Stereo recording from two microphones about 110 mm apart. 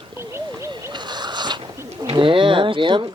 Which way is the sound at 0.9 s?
40° right (ahead or behind).